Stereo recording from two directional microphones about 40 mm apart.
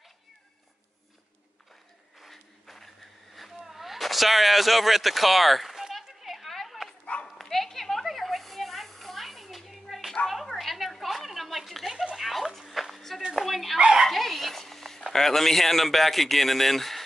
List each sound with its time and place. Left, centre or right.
2.1 s a sound: centre
12.4 s music: centre
13.3 s speech: centre
13.7 s speech: right
14.0 s dog: centre
15.1 s a man's voice: centre